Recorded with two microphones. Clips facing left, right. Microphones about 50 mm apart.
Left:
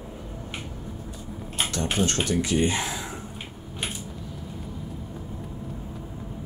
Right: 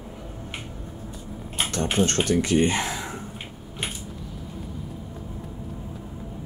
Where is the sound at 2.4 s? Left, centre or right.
Right.